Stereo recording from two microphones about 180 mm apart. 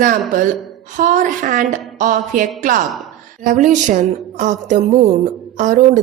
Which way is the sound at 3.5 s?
45° right (ahead or behind).